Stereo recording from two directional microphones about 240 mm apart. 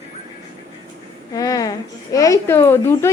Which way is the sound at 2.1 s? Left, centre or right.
Centre.